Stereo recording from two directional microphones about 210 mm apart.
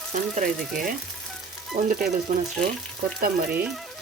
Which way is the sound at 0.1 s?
40° right (ahead or behind).